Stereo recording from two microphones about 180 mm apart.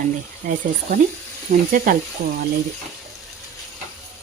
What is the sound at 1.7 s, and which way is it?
Speech, 50° right (ahead or behind).